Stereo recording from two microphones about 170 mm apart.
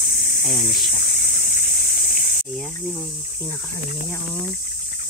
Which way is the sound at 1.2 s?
65° left (ahead or behind).